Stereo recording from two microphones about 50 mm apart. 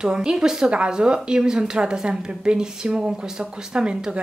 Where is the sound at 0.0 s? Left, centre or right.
Centre.